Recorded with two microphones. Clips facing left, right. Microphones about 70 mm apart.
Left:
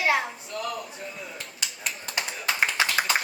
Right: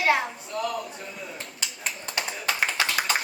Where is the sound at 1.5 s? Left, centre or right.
Right.